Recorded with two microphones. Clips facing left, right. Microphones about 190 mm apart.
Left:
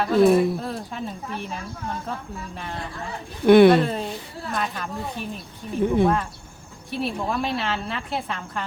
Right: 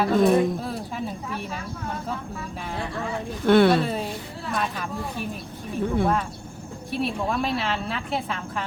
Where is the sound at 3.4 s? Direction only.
15° left (ahead or behind).